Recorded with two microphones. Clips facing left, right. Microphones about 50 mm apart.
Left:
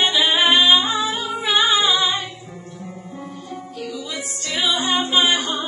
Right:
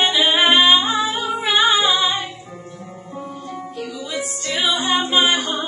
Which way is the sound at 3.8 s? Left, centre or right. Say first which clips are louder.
Right 2 dB; centre.